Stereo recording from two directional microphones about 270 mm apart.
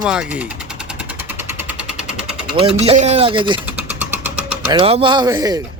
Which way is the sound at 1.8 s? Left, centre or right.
Right.